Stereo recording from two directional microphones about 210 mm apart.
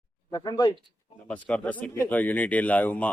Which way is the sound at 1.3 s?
5° left (ahead or behind).